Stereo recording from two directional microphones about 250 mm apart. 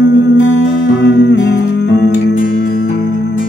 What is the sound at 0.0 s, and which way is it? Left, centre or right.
Music, left.